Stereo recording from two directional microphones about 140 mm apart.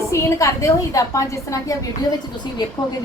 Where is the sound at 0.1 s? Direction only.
20° left (ahead or behind).